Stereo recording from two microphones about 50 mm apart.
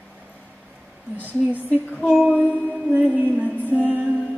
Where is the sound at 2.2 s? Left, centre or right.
Right.